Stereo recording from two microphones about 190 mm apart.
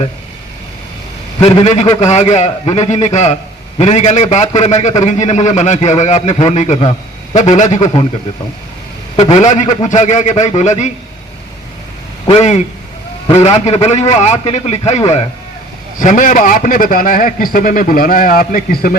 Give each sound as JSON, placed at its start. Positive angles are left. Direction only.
{"t": 1.4, "sound": "a man's voice", "side_deg": 30}
{"t": 9.1, "sound": "a man's voice", "side_deg": 35}
{"t": 12.3, "sound": "a man's voice", "side_deg": 35}